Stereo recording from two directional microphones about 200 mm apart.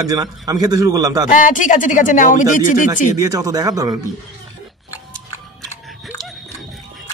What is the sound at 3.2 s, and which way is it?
Speech, 15° right (ahead or behind).